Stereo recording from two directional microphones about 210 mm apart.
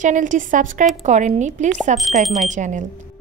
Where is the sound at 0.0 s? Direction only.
35° right (ahead or behind).